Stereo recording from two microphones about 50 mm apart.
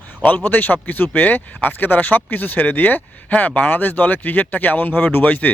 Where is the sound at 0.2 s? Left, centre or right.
Left.